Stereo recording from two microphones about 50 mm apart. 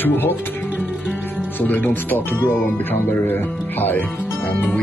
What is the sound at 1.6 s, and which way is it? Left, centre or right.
Speech, left.